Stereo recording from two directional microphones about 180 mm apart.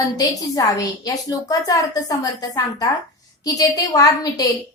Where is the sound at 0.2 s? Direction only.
20° left (ahead or behind).